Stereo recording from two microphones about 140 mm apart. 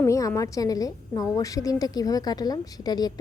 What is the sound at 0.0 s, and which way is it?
A woman's voice, 20° left (ahead or behind).